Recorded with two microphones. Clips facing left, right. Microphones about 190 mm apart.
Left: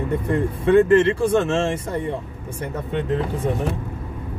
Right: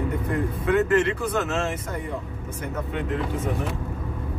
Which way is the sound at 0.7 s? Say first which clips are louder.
Left 7 dB; 25° left (ahead or behind).